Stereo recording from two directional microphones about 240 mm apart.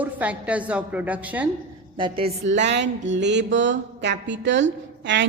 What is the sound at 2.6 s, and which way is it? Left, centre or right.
A woman's voice, right.